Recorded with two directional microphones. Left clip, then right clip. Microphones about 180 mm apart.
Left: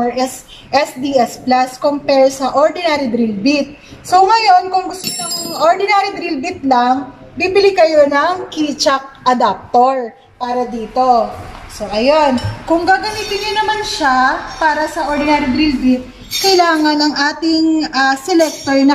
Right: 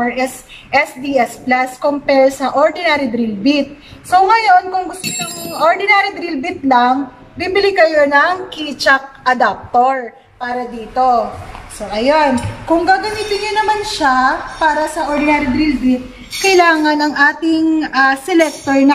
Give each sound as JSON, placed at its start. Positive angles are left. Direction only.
{"t": 0.1, "sound": "a woman's voice", "side_deg": 10}